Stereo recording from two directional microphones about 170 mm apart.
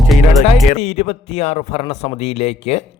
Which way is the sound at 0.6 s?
40° left (ahead or behind).